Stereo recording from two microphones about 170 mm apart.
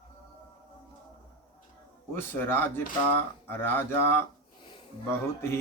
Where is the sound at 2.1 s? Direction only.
10° left (ahead or behind).